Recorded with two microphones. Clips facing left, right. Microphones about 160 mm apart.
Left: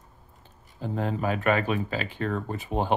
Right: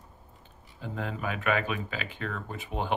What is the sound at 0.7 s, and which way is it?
Speech, 35° left (ahead or behind).